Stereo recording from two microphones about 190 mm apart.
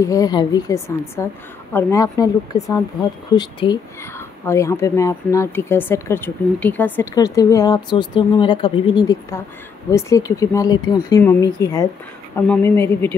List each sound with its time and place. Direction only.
0.0 s a woman's voice: 20° left (ahead or behind)